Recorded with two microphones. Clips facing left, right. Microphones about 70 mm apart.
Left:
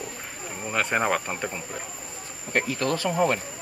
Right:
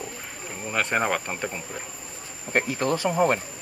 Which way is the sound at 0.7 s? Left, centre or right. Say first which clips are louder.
Even; centre.